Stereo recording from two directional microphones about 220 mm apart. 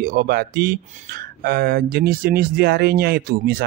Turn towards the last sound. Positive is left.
turn(degrees=-45)  # may be behind; listen again after turning